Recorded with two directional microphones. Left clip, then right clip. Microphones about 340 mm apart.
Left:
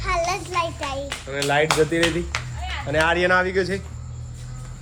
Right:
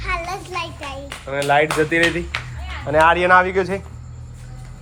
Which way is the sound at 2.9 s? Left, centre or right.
Centre.